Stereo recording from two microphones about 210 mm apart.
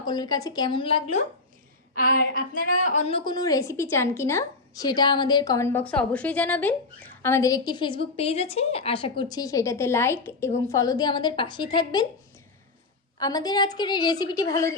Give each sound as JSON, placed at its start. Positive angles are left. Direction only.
{"t": 0.0, "sound": "a woman's voice", "side_deg": 20}
{"t": 2.6, "sound": "a woman's voice", "side_deg": 35}
{"t": 13.1, "sound": "a woman's voice", "side_deg": 20}